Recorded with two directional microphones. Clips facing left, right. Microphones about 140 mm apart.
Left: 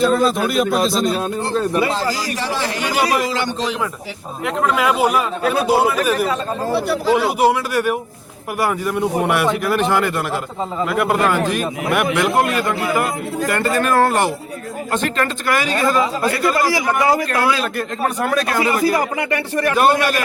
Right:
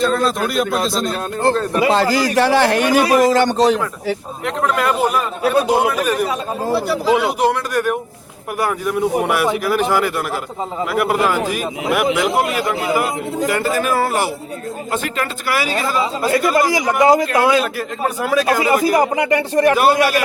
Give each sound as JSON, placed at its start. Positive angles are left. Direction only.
{"t": 0.0, "sound": "speech", "side_deg": 5}
{"t": 1.9, "sound": "a man's voice", "side_deg": -70}
{"t": 3.2, "sound": "a man's voice", "side_deg": -45}
{"t": 4.4, "sound": "speech", "side_deg": 5}
{"t": 13.5, "sound": "speech", "side_deg": -5}
{"t": 16.6, "sound": "speech", "side_deg": -20}
{"t": 17.6, "sound": "speech", "side_deg": -5}
{"t": 18.9, "sound": "speech", "side_deg": -20}
{"t": 19.7, "sound": "speech", "side_deg": -5}